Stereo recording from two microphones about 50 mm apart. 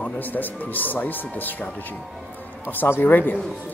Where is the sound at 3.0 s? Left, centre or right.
Left.